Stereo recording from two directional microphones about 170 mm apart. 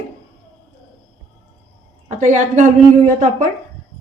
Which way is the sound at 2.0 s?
45° right (ahead or behind).